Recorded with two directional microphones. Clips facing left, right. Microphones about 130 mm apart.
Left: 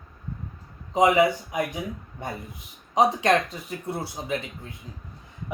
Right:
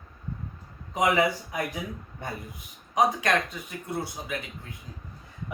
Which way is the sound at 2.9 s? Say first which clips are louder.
Left 3 dB; 25° left (ahead or behind).